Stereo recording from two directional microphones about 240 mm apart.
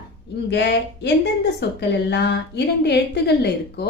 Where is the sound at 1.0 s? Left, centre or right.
Left.